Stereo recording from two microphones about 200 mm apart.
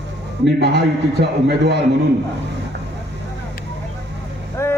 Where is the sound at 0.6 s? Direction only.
55° right (ahead or behind).